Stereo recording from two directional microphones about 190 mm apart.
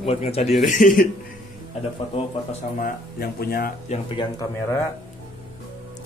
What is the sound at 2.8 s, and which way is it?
Speech, 55° left (ahead or behind).